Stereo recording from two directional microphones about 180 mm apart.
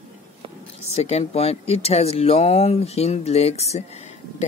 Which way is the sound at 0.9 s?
35° left (ahead or behind).